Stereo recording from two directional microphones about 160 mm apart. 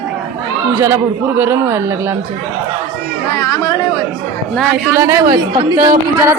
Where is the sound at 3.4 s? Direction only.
20° left (ahead or behind).